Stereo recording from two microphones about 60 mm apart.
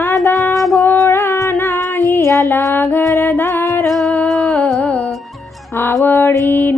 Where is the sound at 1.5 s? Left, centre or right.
Left.